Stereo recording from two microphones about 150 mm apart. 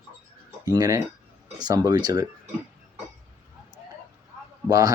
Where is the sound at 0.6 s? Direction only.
25° right (ahead or behind).